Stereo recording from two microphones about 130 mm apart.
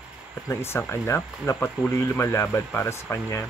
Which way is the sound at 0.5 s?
20° left (ahead or behind).